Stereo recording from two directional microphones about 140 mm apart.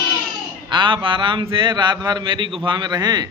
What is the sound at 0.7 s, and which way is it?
A man's voice, 35° right (ahead or behind).